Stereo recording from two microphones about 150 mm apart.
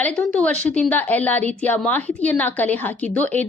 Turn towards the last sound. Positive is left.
turn(degrees=10)  # may be behind; listen again after turning